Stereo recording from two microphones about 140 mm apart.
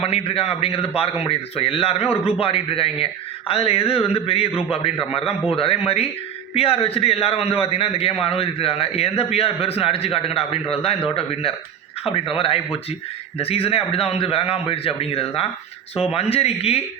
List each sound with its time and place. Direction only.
0.0 s a man's voice: 45° left (ahead or behind)